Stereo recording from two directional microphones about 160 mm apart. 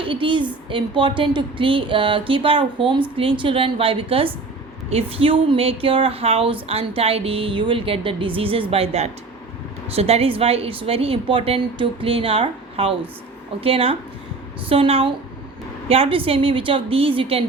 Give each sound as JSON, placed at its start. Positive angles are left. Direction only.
{"t": 0.0, "sound": "a woman's voice", "side_deg": -30}